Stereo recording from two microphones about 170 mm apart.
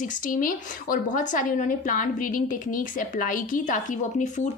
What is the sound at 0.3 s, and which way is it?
Speech, 55° left (ahead or behind).